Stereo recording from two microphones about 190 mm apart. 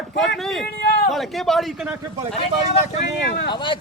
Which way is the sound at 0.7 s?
60° left (ahead or behind).